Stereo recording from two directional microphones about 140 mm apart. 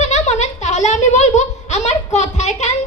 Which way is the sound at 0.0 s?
55° left (ahead or behind).